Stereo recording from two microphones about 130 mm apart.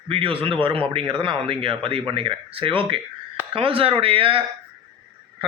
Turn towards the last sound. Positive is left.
turn(degrees=-45)  # may be behind; listen again after turning